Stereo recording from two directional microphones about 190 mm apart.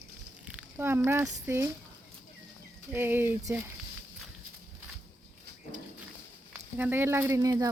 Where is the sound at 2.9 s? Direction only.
10° right (ahead or behind).